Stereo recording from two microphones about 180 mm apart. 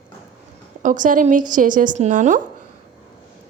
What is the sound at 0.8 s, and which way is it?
A woman's voice, 45° right (ahead or behind).